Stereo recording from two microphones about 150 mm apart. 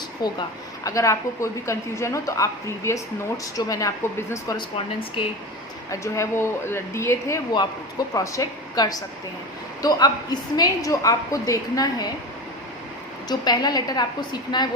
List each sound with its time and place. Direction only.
0.2 s a woman's voice: 25° left (ahead or behind)
5.9 s a woman's voice: 20° left (ahead or behind)
13.2 s a woman's voice: 25° left (ahead or behind)